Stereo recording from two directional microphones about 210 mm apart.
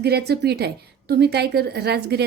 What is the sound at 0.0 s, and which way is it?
A woman's voice, 50° right (ahead or behind).